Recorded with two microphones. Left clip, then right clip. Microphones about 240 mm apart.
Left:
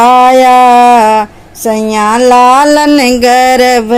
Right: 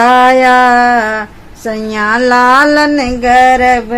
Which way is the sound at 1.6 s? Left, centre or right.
Left.